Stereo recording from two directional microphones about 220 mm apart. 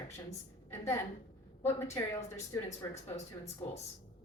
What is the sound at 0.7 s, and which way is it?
A woman's voice, 10° left (ahead or behind).